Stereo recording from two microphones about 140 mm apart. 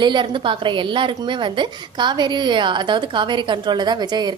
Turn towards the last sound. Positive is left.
turn(degrees=-30)  # may be behind; listen again after turning